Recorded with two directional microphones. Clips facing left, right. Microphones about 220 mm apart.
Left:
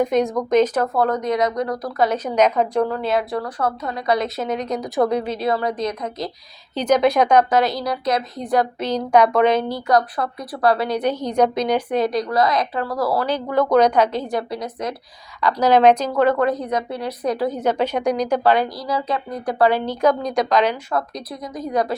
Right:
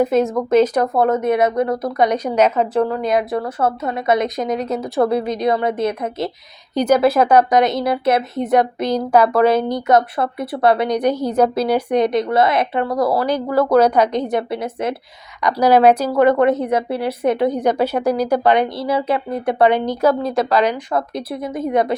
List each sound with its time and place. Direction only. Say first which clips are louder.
0.0 s speech: right 3 dB; 5° right (ahead or behind)
0.9 s a woman's voice: right 4 dB; 25° right (ahead or behind)
2.1 s speech: right 2 dB; 10° right (ahead or behind)
3.3 s a woman's voice: right 4 dB; 25° right (ahead or behind)
6.7 s speech: right 2 dB; 10° right (ahead or behind)
7.6 s a woman's voice: right 5 dB; 25° right (ahead or behind)
15.4 s speech: right 2 dB; 15° right (ahead or behind)
18.5 s a woman's voice: right 4 dB; 25° right (ahead or behind); by 20.7 s 10° right (ahead or behind)
21.2 s a woman's voice: right 6 dB; 25° right (ahead or behind)